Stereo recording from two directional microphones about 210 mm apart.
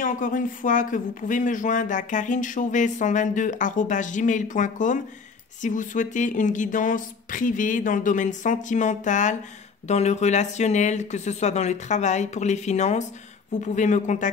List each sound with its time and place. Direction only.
0.0 s speech: 40° left (ahead or behind)